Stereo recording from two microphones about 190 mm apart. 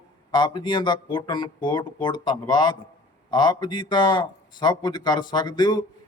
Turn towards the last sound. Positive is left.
turn(degrees=20)  # may be behind; listen again after turning